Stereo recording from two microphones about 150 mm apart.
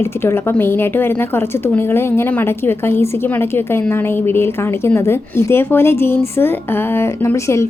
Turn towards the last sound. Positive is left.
turn(degrees=20)  # may be behind; listen again after turning